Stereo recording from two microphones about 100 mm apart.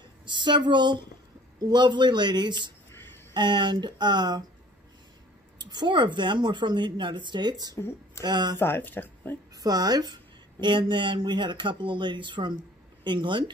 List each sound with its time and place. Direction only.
0.2 s a woman's voice: 50° right (ahead or behind)
5.6 s a woman's voice: 45° right (ahead or behind)
8.5 s speech: 20° left (ahead or behind)
9.6 s a woman's voice: 40° right (ahead or behind)
10.6 s a woman's voice: 50° right (ahead or behind)